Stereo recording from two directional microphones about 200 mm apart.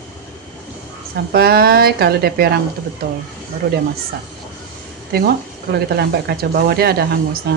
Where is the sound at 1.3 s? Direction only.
50° right (ahead or behind).